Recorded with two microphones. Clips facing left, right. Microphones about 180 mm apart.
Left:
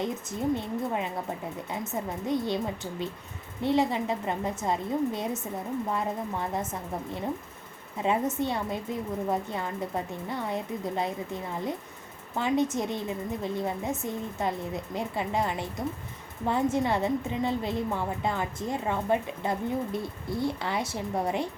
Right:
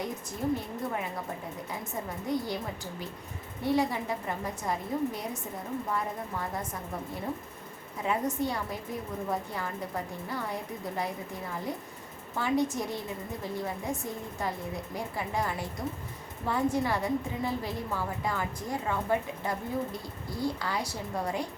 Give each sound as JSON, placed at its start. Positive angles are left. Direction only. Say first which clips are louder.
{"t": 0.0, "sound": "a woman's voice", "louder": "left 3 dB", "side_deg": 25}
{"t": 3.6, "sound": "a woman's voice", "louder": "left 3 dB", "side_deg": 25}
{"t": 8.0, "sound": "a woman's voice", "louder": "left 3 dB", "side_deg": 25}